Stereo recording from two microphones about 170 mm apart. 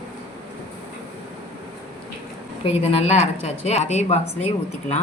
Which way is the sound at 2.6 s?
35° left (ahead or behind).